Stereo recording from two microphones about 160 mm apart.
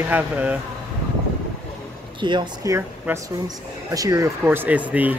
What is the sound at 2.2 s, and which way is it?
Speech, 30° right (ahead or behind).